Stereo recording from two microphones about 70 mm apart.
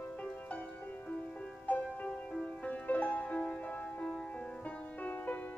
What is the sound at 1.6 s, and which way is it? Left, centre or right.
Music, left.